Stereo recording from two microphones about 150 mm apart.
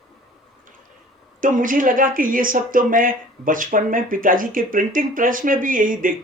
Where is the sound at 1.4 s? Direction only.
65° right (ahead or behind).